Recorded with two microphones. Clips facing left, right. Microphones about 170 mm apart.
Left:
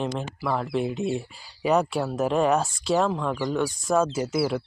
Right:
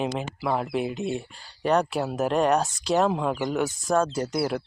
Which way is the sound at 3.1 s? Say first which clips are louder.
Right 1 dB; 15° right (ahead or behind).